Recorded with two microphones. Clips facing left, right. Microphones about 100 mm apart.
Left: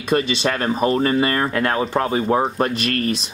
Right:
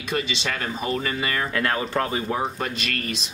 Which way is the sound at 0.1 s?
45° left (ahead or behind).